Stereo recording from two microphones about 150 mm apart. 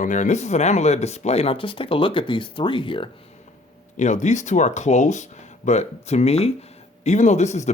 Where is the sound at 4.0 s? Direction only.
55° left (ahead or behind).